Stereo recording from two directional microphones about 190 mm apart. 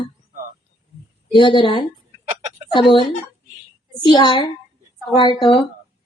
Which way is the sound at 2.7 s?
25° left (ahead or behind).